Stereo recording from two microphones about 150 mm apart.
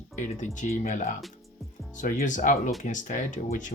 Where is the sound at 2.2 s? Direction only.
55° left (ahead or behind).